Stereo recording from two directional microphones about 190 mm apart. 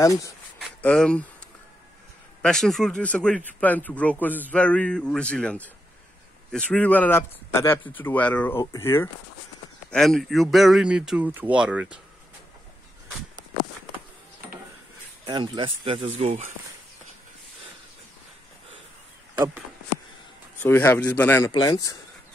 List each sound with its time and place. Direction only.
0.0 s speech: 15° left (ahead or behind)
0.6 s speech: 5° left (ahead or behind)
2.4 s speech: 5° left (ahead or behind)
9.8 s speech: centre (ahead or behind)
15.2 s speech: 25° right (ahead or behind)
19.3 s speech: 10° right (ahead or behind)
20.6 s speech: 10° left (ahead or behind)